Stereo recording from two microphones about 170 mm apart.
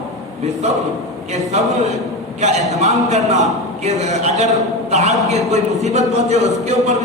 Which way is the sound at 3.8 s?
40° right (ahead or behind).